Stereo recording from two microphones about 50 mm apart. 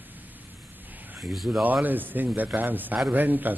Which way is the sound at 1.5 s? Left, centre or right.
Right.